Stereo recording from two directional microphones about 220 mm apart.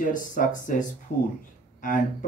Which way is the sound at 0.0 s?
35° left (ahead or behind).